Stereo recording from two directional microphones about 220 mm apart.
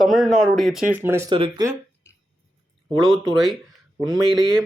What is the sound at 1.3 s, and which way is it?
Speech, 20° right (ahead or behind).